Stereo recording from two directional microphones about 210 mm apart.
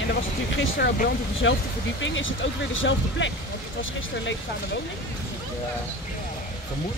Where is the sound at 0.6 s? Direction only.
55° left (ahead or behind).